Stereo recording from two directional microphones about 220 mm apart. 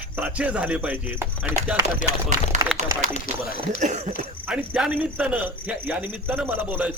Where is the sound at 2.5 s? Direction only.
35° right (ahead or behind).